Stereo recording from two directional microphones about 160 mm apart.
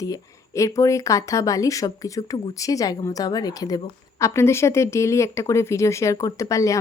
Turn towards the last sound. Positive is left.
turn(degrees=20)  # may be behind; listen again after turning